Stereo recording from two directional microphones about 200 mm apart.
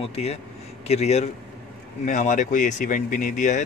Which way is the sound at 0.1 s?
30° left (ahead or behind).